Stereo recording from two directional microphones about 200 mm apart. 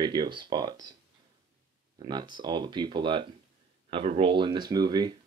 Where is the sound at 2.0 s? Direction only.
20° right (ahead or behind).